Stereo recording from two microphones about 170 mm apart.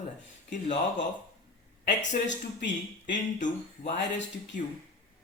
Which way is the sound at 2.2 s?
90° left.